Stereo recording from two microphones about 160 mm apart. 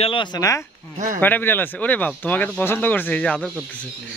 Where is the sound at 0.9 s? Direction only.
55° right (ahead or behind).